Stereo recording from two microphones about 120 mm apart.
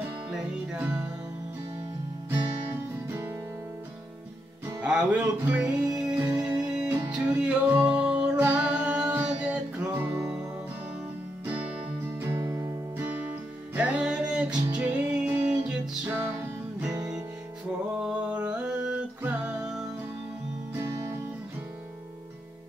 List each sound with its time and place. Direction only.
0.3 s music: 5° right (ahead or behind)
2.2 s music: 15° right (ahead or behind)
4.8 s music: 10° right (ahead or behind)
11.4 s music: 15° right (ahead or behind)
14.5 s music: 35° right (ahead or behind)
14.8 s music: 10° right (ahead or behind)
18.0 s music: 10° right (ahead or behind)
20.7 s music: 25° right (ahead or behind)